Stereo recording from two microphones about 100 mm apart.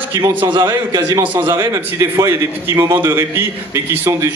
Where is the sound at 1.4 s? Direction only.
30° right (ahead or behind).